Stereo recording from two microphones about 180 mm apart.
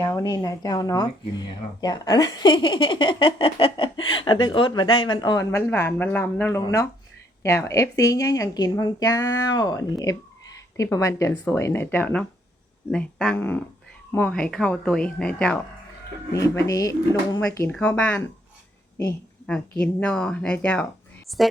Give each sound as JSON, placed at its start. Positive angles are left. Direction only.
{"t": 0.0, "sound": "speech", "side_deg": 15}
{"t": 16.3, "sound": "speech", "side_deg": 20}
{"t": 19.5, "sound": "a woman's voice", "side_deg": 5}